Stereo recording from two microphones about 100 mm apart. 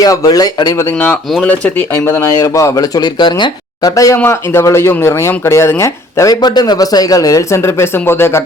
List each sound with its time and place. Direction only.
0.0 s speech: 35° left (ahead or behind)
0.9 s speech: 15° left (ahead or behind); by 3.5 s 50° left (ahead or behind)
3.8 s speech: 35° left (ahead or behind)
6.3 s speech: 45° left (ahead or behind); by 8.4 s 25° left (ahead or behind)